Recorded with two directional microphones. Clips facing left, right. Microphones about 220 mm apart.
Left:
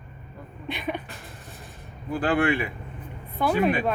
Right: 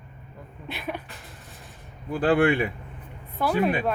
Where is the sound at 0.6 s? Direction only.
5° right (ahead or behind).